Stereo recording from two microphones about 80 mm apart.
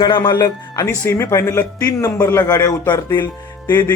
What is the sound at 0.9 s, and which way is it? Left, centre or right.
Speech, left.